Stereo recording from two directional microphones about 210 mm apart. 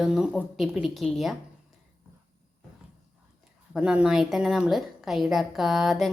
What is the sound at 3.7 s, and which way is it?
A woman's voice, 5° right (ahead or behind).